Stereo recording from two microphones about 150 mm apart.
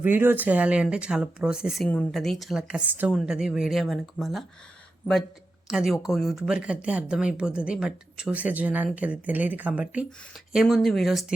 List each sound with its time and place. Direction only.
0.0 s a woman's voice: 15° right (ahead or behind)
5.6 s speech: 5° right (ahead or behind)